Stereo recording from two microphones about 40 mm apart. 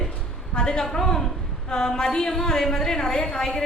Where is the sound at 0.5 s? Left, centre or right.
Centre.